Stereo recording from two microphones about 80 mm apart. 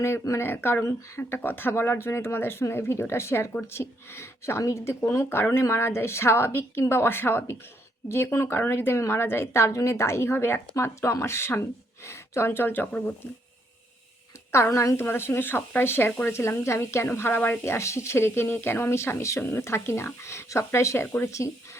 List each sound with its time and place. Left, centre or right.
0.0 s a woman's voice: left
14.5 s a woman's voice: left
17.1 s a woman's voice: left